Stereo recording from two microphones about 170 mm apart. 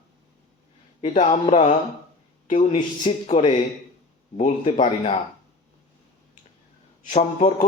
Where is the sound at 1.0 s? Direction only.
40° left (ahead or behind).